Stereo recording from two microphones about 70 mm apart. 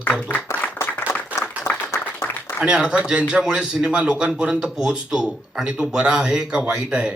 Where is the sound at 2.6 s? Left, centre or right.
Centre.